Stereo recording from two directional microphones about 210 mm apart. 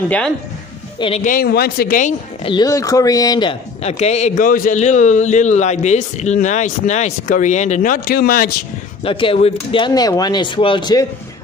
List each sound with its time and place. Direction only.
0.9 s speech: 25° left (ahead or behind)
1.2 s speech: 45° left (ahead or behind)
2.4 s speech: 20° left (ahead or behind); by 8.5 s 45° left (ahead or behind)
9.0 s speech: 25° left (ahead or behind)